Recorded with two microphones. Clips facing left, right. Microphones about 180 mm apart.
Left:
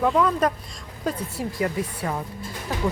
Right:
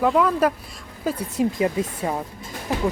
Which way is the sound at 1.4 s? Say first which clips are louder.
Right 8 dB; 20° right (ahead or behind).